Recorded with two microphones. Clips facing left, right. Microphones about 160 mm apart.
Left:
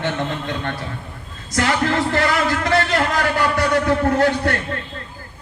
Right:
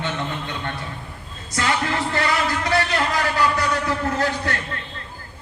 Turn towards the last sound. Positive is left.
turn(degrees=60)  # may be behind; listen again after turning